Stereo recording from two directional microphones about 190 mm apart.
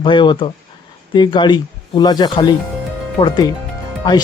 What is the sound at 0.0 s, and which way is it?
Speech, 25° left (ahead or behind).